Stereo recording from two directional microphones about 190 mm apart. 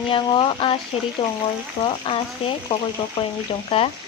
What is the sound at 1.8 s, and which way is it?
Speech, 30° left (ahead or behind).